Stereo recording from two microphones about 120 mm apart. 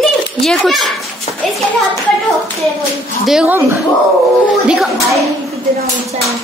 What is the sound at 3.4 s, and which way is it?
Speech, 20° right (ahead or behind).